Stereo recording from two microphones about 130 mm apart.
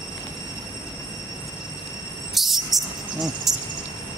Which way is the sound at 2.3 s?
Centre (ahead or behind).